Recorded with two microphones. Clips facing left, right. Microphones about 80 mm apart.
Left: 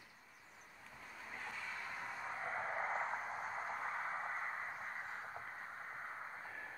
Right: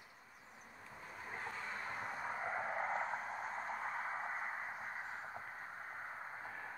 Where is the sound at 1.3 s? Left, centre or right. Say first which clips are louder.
Right 3 dB; right.